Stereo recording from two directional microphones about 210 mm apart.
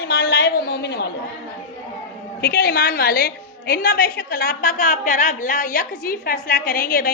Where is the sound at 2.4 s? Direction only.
50° left (ahead or behind).